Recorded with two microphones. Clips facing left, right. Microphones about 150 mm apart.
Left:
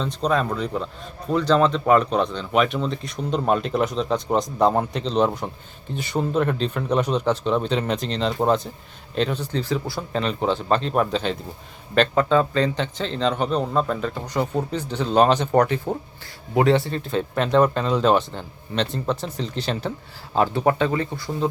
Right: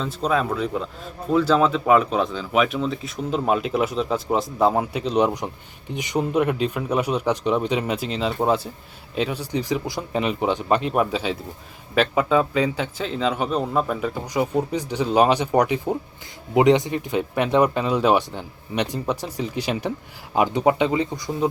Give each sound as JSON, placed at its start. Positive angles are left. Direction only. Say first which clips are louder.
{"t": 0.0, "sound": "a man's voice", "louder": "even", "side_deg": -5}